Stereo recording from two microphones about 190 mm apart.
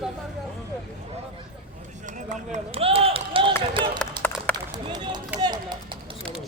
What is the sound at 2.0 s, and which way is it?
Run, 40° right (ahead or behind).